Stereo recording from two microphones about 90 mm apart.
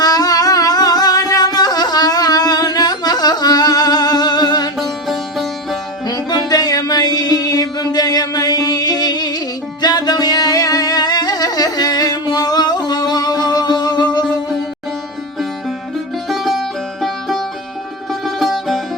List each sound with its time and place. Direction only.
0.0 s music: 45° left (ahead or behind)
4.8 s music: centre (ahead or behind)
6.1 s music: 50° left (ahead or behind)
16.3 s music: centre (ahead or behind)